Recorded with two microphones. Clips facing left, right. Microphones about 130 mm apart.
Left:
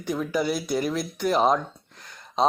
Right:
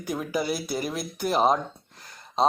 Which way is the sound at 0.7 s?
5° right (ahead or behind).